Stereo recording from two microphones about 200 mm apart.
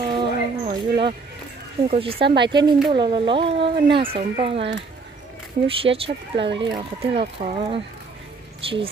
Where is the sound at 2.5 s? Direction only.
20° right (ahead or behind).